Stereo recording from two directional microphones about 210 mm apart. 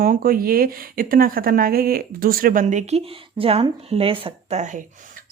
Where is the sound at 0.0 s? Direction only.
45° right (ahead or behind).